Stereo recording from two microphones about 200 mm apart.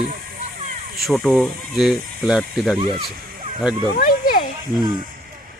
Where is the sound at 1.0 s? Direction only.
Centre (ahead or behind).